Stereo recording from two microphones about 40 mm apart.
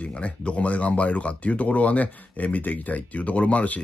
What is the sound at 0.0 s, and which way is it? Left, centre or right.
Speech, left.